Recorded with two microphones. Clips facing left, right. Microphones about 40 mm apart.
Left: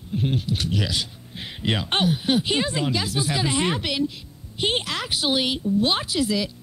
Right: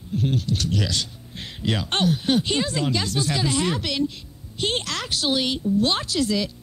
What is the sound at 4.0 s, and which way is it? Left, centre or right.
Speech, centre.